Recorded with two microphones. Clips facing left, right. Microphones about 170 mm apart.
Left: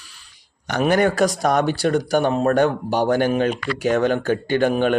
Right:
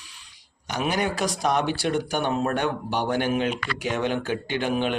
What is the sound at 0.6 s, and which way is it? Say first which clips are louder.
A man's voice: left 8 dB; 55° left (ahead or behind).